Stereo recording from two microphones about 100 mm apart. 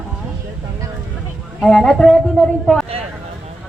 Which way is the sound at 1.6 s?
5° left (ahead or behind).